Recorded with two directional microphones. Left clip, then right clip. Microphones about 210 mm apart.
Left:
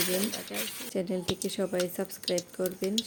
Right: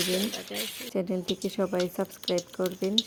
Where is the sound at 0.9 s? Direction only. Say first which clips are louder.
Right 1 dB; 15° right (ahead or behind).